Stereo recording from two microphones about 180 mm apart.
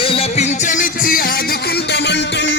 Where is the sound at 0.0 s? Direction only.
30° left (ahead or behind); by 1.2 s 50° left (ahead or behind).